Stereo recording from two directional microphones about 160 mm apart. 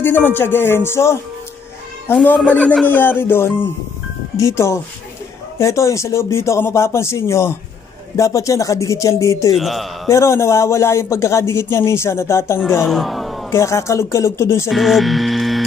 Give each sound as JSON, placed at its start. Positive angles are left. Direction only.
{"t": 0.0, "sound": "a man's voice", "side_deg": 15}
{"t": 2.1, "sound": "a man's voice", "side_deg": 10}
{"t": 9.6, "sound": "a man's voice", "side_deg": 0}
{"t": 10.0, "sound": "a man's voice", "side_deg": 15}
{"t": 12.5, "sound": "speech", "side_deg": -5}
{"t": 13.5, "sound": "a man's voice", "side_deg": 15}
{"t": 14.7, "sound": "hum", "side_deg": 0}